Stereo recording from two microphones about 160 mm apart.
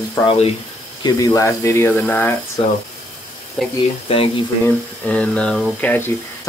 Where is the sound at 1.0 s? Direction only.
20° left (ahead or behind).